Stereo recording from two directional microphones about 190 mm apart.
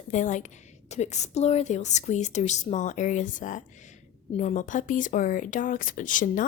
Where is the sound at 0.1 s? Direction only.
40° left (ahead or behind).